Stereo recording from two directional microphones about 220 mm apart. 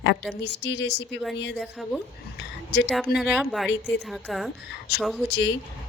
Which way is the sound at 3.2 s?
Centre (ahead or behind).